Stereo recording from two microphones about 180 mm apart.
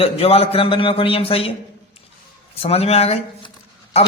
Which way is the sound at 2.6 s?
35° left (ahead or behind).